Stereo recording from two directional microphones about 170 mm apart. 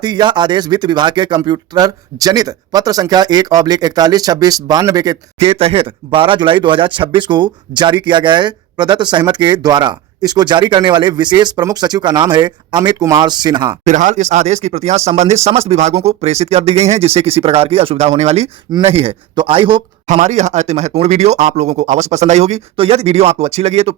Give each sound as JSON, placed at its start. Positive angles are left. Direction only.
{"t": 0.0, "sound": "speech", "side_deg": -25}
{"t": 5.4, "sound": "speech", "side_deg": -35}
{"t": 13.8, "sound": "speech", "side_deg": -45}
{"t": 20.1, "sound": "speech", "side_deg": -45}